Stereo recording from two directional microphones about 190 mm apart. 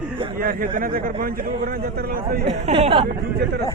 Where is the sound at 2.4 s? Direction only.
30° right (ahead or behind).